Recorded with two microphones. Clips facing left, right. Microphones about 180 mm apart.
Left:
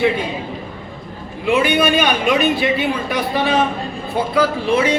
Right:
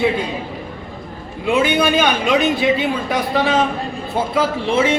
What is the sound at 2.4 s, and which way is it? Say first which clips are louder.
Speech: right 1 dB; 20° right (ahead or behind).